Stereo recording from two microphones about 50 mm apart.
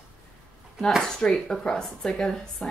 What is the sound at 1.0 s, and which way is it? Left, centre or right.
A woman's voice, centre.